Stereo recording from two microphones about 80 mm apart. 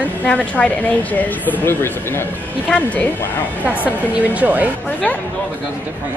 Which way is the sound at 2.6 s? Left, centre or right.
Centre.